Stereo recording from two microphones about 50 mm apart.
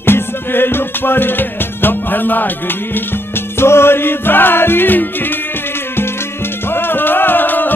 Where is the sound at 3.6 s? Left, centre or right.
Left.